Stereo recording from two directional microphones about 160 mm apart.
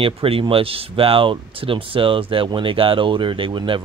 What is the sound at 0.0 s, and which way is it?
Speech, 35° right (ahead or behind).